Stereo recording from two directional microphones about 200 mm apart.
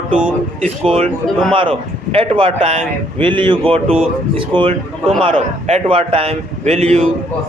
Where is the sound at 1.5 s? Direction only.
25° right (ahead or behind).